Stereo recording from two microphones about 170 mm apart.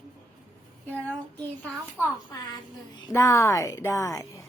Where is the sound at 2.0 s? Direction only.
20° left (ahead or behind).